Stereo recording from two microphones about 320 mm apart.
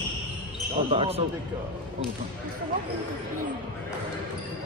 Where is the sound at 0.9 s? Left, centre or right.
Centre.